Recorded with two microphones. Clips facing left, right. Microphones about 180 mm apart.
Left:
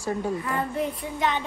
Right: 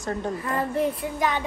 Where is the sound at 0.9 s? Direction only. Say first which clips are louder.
Right 1 dB; 5° right (ahead or behind).